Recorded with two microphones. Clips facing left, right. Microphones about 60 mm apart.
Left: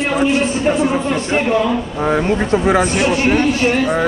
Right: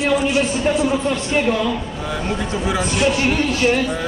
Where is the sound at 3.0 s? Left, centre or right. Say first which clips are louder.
Left 3 dB; left.